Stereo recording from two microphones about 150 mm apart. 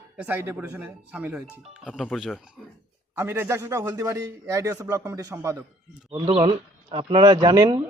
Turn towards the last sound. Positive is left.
turn(degrees=-25)  # may be behind; listen again after turning